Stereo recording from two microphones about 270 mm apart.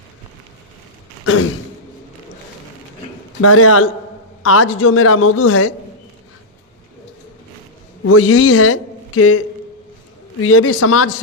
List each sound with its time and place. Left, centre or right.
1.2 s a sound: left
3.4 s a woman's voice: left
8.0 s a man's voice: left
10.4 s a woman's voice: left